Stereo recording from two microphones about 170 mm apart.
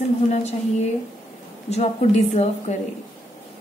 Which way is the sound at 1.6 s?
40° left (ahead or behind).